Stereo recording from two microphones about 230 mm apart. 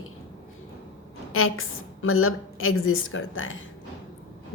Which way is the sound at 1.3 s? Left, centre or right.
Left.